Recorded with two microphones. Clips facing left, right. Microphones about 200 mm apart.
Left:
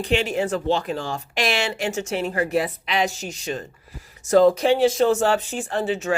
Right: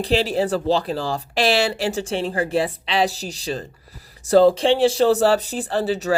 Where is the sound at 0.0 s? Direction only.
35° right (ahead or behind).